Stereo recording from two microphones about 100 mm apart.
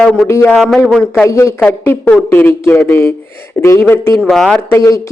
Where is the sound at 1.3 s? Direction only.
30° left (ahead or behind).